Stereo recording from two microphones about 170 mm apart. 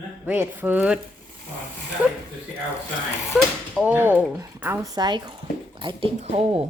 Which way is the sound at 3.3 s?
Centre (ahead or behind).